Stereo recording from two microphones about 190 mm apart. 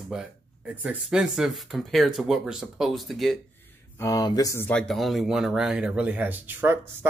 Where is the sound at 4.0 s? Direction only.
15° left (ahead or behind); by 6.7 s 10° right (ahead or behind).